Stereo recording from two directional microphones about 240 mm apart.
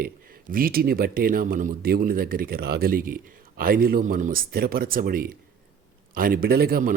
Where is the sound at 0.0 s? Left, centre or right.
Right.